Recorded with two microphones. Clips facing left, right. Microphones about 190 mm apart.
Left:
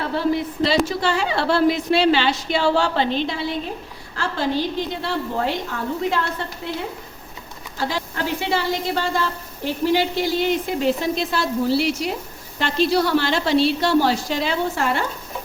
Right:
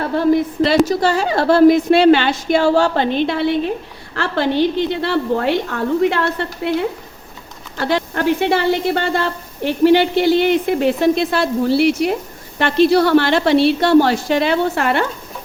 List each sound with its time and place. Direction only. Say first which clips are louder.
0.2 s a woman's voice: right 7 dB; 55° right (ahead or behind)
0.9 s a woman's voice: right 5 dB; 40° right (ahead or behind); by 6.2 s 65° right (ahead or behind)
7.8 s a woman's voice: right 6 dB; 65° right (ahead or behind)